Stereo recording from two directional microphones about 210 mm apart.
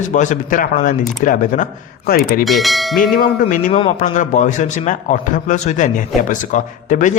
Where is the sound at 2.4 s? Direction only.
Centre (ahead or behind).